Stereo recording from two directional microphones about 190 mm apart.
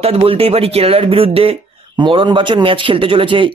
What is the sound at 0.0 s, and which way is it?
A man's voice, 30° right (ahead or behind).